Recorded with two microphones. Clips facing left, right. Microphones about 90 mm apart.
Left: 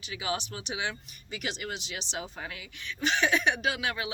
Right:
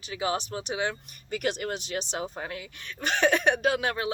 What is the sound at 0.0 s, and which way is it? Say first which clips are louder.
Speech: right 4 dB; 35° right (ahead or behind).